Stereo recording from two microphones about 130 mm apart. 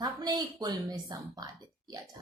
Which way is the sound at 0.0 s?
30° right (ahead or behind).